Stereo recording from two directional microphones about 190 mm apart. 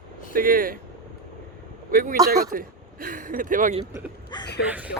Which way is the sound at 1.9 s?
50° right (ahead or behind).